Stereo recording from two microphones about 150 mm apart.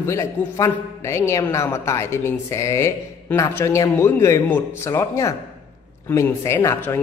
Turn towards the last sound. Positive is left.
turn(degrees=15)  # may be behind; listen again after turning